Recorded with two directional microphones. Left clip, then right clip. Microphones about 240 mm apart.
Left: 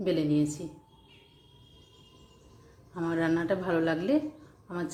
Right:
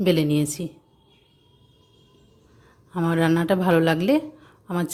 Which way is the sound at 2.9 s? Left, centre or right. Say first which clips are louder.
Right 7 dB; right.